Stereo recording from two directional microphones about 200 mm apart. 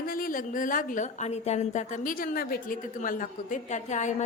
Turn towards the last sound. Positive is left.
turn(degrees=35)  # may be behind; listen again after turning